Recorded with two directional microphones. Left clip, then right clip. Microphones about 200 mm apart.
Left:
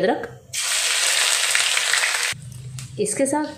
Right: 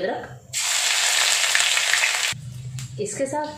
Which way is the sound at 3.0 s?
45° left (ahead or behind).